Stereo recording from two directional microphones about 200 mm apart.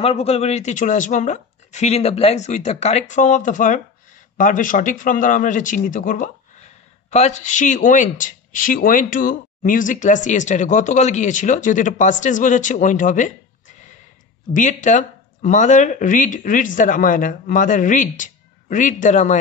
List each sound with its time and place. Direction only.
0.0 s speech: 30° left (ahead or behind)
14.5 s speech: 40° left (ahead or behind)